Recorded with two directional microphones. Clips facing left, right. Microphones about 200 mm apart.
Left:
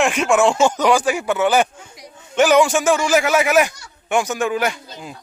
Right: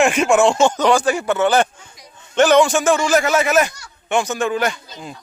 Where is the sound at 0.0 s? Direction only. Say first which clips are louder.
Right 2 dB; centre (ahead or behind).